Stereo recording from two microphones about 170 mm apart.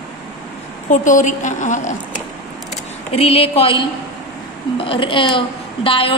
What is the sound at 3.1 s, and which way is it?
Speech, 35° left (ahead or behind).